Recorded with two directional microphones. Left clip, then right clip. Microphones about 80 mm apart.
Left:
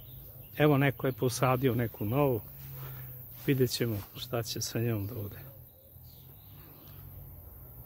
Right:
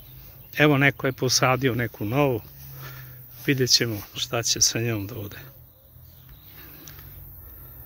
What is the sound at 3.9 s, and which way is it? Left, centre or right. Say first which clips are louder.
Speech: right 8 dB; right.